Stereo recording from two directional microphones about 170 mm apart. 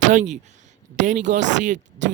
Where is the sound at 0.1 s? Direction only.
50° right (ahead or behind).